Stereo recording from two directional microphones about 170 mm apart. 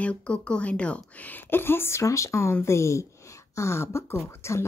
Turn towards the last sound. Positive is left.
turn(degrees=15)  # may be behind; listen again after turning